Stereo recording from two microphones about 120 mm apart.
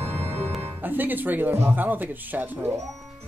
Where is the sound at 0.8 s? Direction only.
15° right (ahead or behind).